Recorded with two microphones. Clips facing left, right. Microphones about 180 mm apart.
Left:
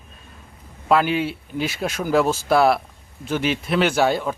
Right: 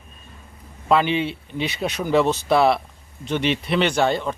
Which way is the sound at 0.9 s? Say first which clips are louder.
Even; 5° left (ahead or behind).